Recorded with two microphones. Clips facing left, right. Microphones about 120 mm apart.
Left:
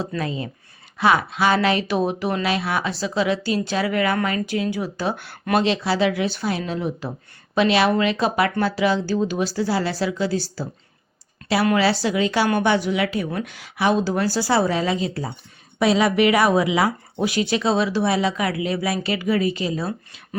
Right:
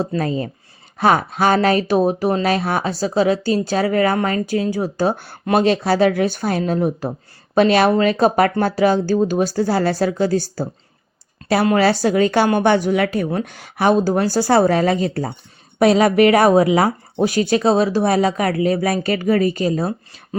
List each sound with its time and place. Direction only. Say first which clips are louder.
0.2 s speech: right 5 dB; 40° right (ahead or behind)
11.4 s a sound: right 4 dB; 30° right (ahead or behind)
11.8 s speech: right 5 dB; 45° right (ahead or behind)